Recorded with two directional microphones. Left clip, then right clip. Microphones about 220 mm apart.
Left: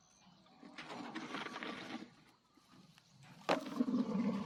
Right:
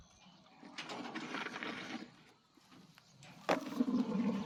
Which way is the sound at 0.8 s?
50° right (ahead or behind).